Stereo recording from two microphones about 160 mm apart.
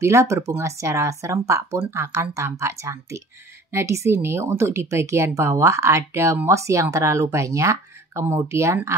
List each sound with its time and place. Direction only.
0.0 s speech: 20° right (ahead or behind)